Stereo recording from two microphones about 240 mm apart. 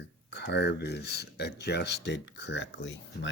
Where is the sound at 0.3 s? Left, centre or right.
Left.